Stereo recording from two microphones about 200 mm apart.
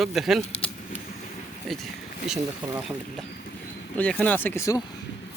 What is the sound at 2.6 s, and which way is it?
Speech, 10° right (ahead or behind).